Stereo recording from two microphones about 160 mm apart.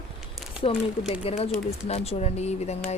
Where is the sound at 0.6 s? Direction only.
40° left (ahead or behind).